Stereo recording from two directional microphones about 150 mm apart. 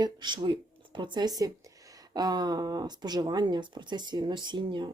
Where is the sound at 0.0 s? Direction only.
30° right (ahead or behind).